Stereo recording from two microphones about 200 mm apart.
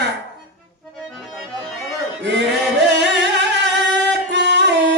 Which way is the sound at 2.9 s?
60° right (ahead or behind).